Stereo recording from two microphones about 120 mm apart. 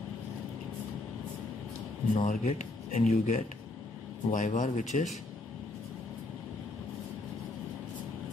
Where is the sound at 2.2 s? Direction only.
80° left.